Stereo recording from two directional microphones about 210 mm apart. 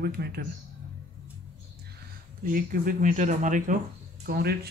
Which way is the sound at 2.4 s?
45° right (ahead or behind).